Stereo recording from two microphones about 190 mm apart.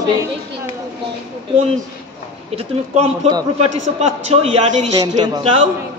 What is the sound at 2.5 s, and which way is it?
Speech, 30° right (ahead or behind).